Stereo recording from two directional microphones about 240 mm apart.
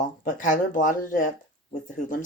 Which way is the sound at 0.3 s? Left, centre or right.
Left.